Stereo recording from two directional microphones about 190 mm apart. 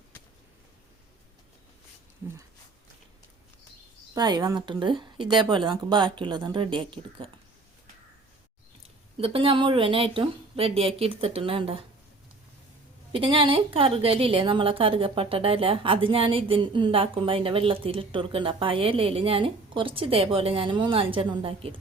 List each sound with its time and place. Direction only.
4.1 s a woman's voice: 20° right (ahead or behind)
9.2 s a woman's voice: 30° right (ahead or behind)
13.1 s a woman's voice: 25° right (ahead or behind)